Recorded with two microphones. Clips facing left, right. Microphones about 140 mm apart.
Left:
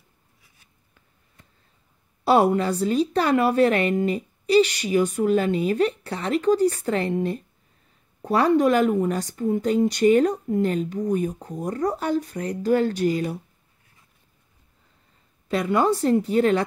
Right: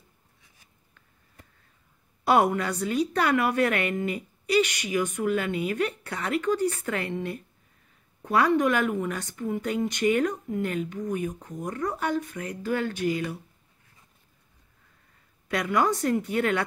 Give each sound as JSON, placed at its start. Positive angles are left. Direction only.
{"t": 2.2, "sound": "a woman's voice", "side_deg": 30}
{"t": 15.4, "sound": "a woman's voice", "side_deg": 30}